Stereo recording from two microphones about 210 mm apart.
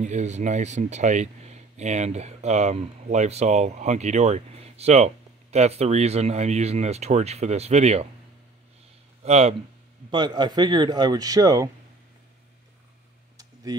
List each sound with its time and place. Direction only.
0.0 s speech: 35° right (ahead or behind)
9.2 s speech: 30° right (ahead or behind)
10.1 s speech: 20° right (ahead or behind)
13.7 s speech: 15° right (ahead or behind)